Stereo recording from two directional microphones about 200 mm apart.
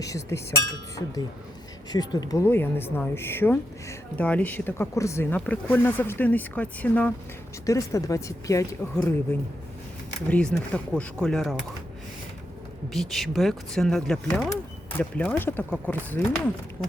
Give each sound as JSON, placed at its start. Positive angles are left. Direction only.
{"t": 0.0, "sound": "speech", "side_deg": 15}
{"t": 12.9, "sound": "speech", "side_deg": 0}